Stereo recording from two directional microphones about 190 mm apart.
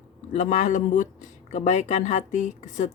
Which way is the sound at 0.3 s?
40° left (ahead or behind).